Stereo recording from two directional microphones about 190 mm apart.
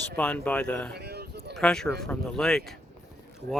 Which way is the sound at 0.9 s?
60° right (ahead or behind).